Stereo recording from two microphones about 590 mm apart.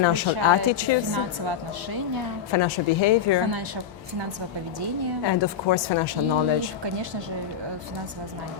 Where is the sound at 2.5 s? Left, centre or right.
Left.